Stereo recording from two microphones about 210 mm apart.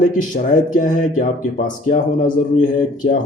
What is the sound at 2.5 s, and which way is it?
Speech, 35° left (ahead or behind).